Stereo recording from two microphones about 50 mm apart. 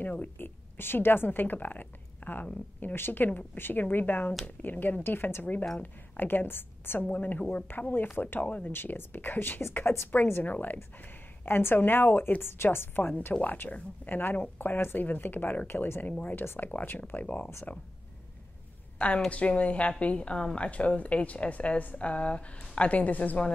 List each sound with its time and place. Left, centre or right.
0.4 s a woman's voice: left
7.1 s speech: left
8.7 s speech: left
10.1 s speech: left
11.0 s speech: left
13.3 s speech: left
17.1 s a woman's voice: left
18.9 s a woman's voice: left